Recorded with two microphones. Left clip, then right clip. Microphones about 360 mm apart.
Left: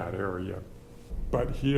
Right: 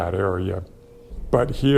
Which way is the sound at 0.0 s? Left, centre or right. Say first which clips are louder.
Right 10 dB; right.